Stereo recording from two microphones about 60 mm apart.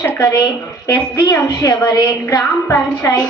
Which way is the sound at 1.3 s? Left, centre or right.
Left.